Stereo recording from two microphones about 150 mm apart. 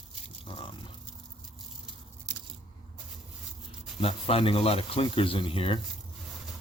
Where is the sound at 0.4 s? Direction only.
35° left (ahead or behind).